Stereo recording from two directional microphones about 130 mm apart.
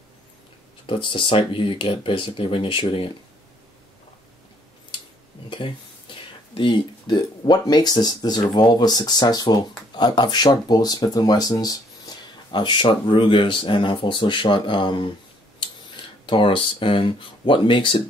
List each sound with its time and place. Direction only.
0.8 s speech: 40° left (ahead or behind)
5.5 s speech: 40° left (ahead or behind)
16.3 s speech: 40° left (ahead or behind)